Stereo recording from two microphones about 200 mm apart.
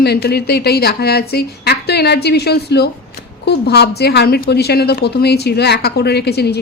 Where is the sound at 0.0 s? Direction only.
55° left (ahead or behind).